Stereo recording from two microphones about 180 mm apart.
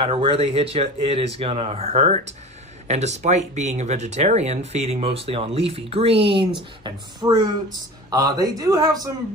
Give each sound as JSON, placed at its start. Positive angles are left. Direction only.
{"t": 0.0, "sound": "speech", "side_deg": -30}